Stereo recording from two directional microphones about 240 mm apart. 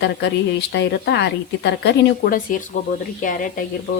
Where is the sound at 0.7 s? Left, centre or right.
Left.